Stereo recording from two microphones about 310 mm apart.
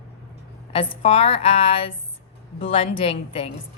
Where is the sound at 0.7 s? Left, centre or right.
Centre.